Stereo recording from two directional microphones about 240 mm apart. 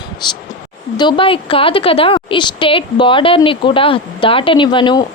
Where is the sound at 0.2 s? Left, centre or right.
Centre.